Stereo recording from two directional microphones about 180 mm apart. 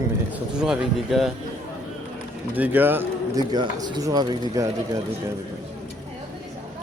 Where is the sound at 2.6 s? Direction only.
10° right (ahead or behind).